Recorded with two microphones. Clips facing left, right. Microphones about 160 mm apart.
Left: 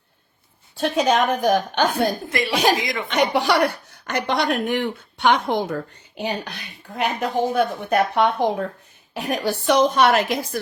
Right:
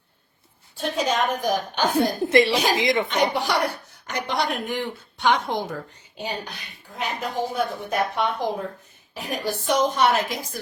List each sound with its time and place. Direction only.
0.8 s speech: 70° left (ahead or behind)
2.2 s speech: 25° right (ahead or behind)
3.1 s speech: 75° left (ahead or behind)